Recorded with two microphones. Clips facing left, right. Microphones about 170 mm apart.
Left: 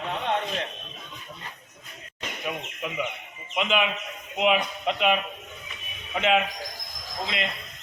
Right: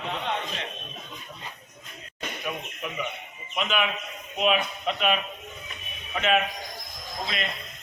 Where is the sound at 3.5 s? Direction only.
20° left (ahead or behind).